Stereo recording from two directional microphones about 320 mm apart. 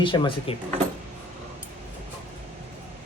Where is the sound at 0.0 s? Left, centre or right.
Centre.